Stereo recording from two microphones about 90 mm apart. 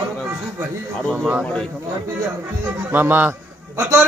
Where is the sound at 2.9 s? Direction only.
20° right (ahead or behind).